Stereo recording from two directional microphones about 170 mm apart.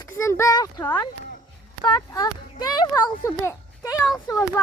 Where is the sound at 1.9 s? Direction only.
25° left (ahead or behind).